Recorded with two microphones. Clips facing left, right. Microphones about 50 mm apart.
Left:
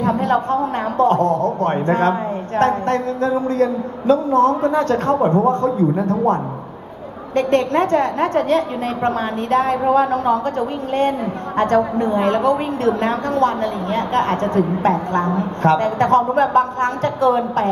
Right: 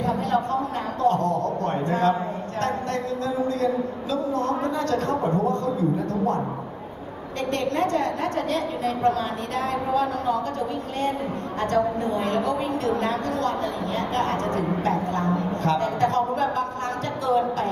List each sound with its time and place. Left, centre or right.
0.0 s a sound: left
3.4 s a man's voice: left
7.3 s a woman's voice: left